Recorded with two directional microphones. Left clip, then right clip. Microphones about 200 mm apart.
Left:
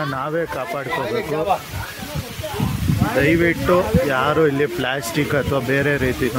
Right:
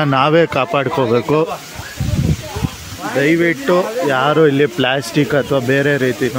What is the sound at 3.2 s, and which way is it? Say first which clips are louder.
Speech: right 3 dB; 20° right (ahead or behind).